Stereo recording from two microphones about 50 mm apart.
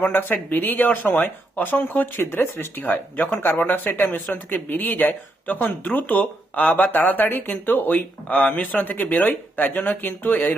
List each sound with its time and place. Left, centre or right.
0.0 s speech: left
8.8 s speech: left